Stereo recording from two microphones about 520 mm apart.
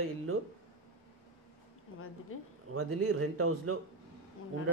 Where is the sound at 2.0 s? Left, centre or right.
Left.